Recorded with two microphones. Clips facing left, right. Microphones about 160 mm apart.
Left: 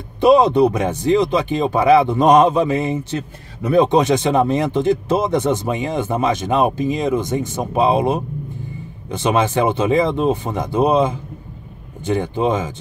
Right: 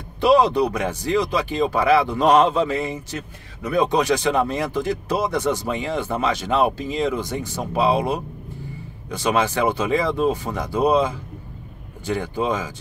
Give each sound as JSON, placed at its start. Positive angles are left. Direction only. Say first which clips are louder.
{"t": 0.2, "sound": "speech", "louder": "left 4 dB", "side_deg": 20}